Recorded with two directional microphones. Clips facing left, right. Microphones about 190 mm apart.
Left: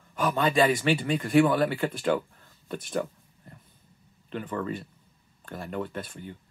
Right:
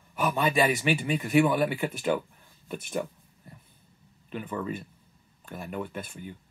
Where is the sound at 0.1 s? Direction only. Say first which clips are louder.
Left 1 dB; 10° right (ahead or behind).